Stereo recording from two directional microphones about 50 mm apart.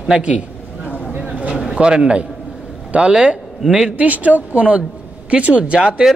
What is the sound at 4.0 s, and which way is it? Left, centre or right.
A man's voice, right.